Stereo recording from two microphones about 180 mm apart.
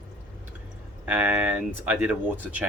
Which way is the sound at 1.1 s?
10° right (ahead or behind).